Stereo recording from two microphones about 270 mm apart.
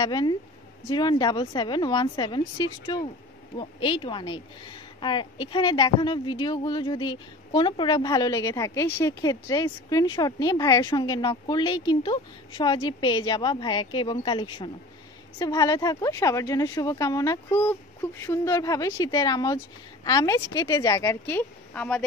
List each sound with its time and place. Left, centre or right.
0.0 s speech: centre